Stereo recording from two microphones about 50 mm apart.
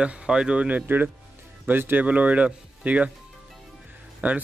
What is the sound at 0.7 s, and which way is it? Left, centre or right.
Speech, right.